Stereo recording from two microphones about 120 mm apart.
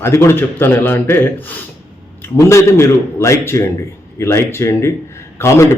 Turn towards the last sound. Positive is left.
turn(degrees=25)  # may be behind; listen again after turning